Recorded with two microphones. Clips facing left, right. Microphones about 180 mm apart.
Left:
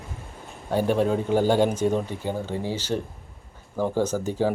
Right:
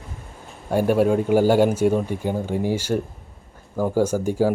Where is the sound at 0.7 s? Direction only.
10° right (ahead or behind).